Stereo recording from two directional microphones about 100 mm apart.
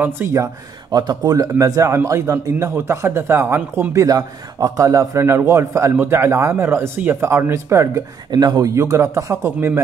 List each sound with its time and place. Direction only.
0.0 s a man's voice: 25° right (ahead or behind)
0.9 s a man's voice: 40° right (ahead or behind); by 4.0 s 25° right (ahead or behind)
4.0 s a man's voice: 40° right (ahead or behind)
8.3 s speech: 45° right (ahead or behind); by 9.8 s 25° right (ahead or behind)